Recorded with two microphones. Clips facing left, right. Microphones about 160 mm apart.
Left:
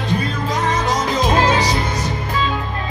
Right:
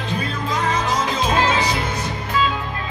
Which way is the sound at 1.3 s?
35° left (ahead or behind).